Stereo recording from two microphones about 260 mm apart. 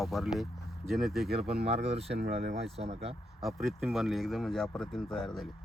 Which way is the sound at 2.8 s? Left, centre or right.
Right.